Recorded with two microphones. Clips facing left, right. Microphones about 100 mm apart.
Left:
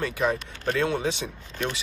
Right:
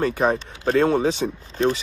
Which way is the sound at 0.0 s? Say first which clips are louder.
Right 5 dB; 40° right (ahead or behind).